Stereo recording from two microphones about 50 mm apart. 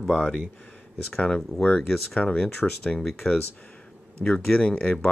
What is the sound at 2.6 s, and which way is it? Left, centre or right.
Speech, centre.